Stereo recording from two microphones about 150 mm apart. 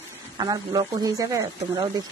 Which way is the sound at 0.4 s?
25° right (ahead or behind).